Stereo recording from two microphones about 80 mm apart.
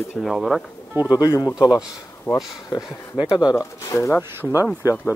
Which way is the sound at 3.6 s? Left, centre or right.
Left.